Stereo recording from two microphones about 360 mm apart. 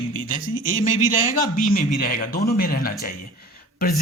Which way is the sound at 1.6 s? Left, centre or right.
Left.